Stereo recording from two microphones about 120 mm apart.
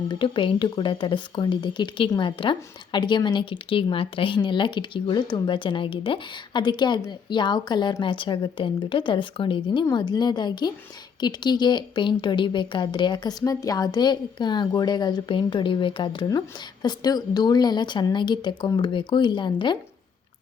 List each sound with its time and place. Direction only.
0.1 s speech: 45° left (ahead or behind)